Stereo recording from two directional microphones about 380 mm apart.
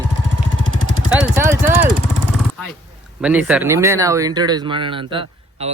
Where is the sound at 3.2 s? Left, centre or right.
Centre.